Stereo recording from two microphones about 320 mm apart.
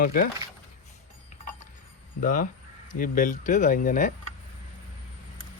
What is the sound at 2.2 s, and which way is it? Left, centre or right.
Speech, left.